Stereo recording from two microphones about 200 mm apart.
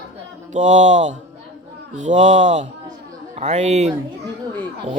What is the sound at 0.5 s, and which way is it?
Speech, 35° right (ahead or behind).